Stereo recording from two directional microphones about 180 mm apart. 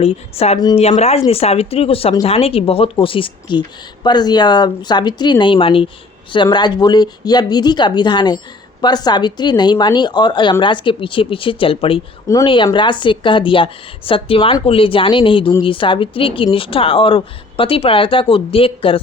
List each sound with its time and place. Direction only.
0.0 s a woman's voice: 35° left (ahead or behind)